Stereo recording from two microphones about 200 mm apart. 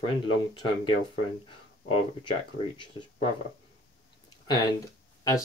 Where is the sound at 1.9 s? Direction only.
25° left (ahead or behind).